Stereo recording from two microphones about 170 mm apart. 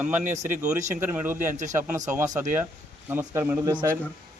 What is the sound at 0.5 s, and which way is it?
Speech, 45° right (ahead or behind).